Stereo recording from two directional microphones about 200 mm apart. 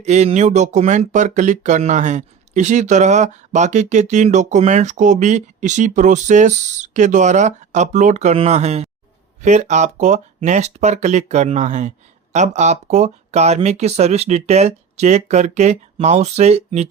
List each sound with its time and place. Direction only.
0.0 s speech: 35° right (ahead or behind)